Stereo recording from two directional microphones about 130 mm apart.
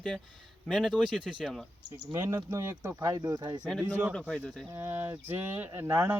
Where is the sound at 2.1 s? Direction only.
20° right (ahead or behind).